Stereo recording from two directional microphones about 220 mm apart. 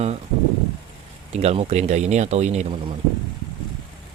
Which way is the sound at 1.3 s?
30° right (ahead or behind).